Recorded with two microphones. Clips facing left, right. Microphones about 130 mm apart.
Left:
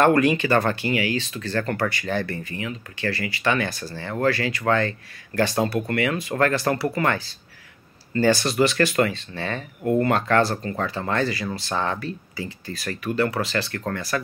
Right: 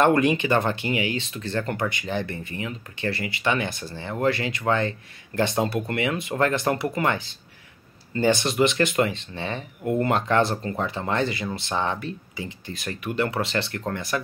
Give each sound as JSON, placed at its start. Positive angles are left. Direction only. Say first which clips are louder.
{"t": 0.0, "sound": "speech", "louder": "left 1 dB", "side_deg": -20}